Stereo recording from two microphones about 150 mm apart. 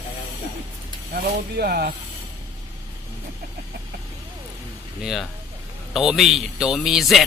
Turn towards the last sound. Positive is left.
turn(degrees=0)  # may be behind; listen again after turning